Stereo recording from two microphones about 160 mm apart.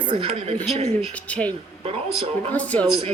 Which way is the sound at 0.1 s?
40° right (ahead or behind).